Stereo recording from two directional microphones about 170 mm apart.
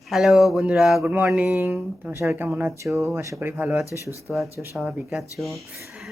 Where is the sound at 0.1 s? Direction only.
Centre (ahead or behind).